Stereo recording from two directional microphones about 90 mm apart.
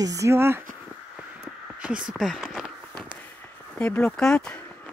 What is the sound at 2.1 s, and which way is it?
Speech, centre (ahead or behind).